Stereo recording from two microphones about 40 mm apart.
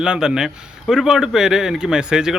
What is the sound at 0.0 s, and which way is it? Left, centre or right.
Speech, centre.